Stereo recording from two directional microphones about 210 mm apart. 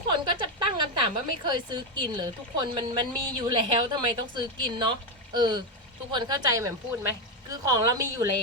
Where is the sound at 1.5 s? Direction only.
20° right (ahead or behind).